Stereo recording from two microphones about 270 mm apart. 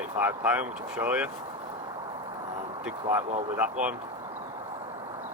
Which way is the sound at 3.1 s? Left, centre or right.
Centre.